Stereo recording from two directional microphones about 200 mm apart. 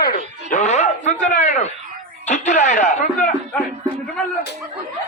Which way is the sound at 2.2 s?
35° left (ahead or behind).